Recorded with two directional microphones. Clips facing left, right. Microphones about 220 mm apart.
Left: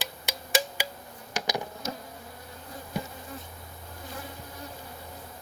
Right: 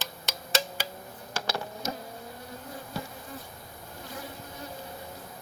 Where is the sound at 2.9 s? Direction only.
15° left (ahead or behind).